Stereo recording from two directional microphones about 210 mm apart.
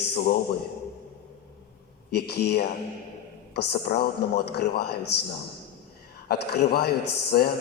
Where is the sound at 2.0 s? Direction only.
50° left (ahead or behind).